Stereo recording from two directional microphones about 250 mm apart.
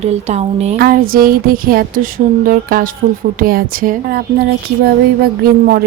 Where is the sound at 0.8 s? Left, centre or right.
Right.